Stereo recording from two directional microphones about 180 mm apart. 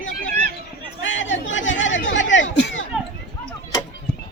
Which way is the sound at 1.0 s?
90° left.